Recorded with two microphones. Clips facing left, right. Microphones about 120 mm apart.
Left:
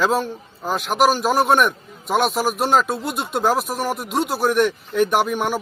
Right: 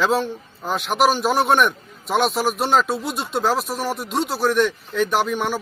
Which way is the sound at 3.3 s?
10° left (ahead or behind).